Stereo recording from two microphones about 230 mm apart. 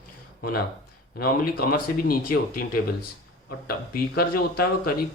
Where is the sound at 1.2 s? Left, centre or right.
Left.